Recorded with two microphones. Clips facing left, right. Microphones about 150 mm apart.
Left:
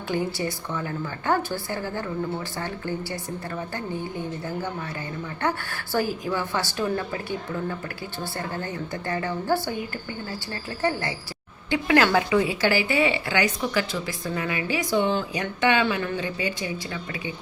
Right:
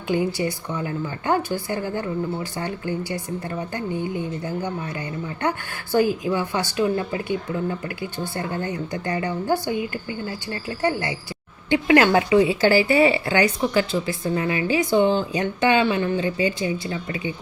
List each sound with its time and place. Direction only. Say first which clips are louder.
0.1 s a woman's voice: right 4 dB; 15° right (ahead or behind)
5.4 s a woman's voice: right 1 dB; 20° right (ahead or behind)
11.7 s a woman's voice: right 4 dB; 20° right (ahead or behind)